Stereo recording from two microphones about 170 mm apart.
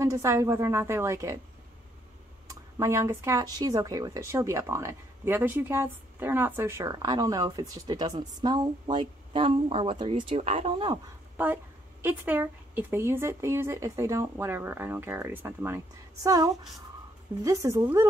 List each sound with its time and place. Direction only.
0.0 s a woman's voice: 20° right (ahead or behind)
2.4 s speech: 15° right (ahead or behind); by 11.0 s 35° right (ahead or behind)
11.3 s a woman's voice: 10° right (ahead or behind)
17.5 s speech: 20° right (ahead or behind)